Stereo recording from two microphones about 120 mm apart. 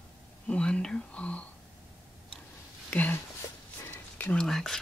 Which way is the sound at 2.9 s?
15° left (ahead or behind).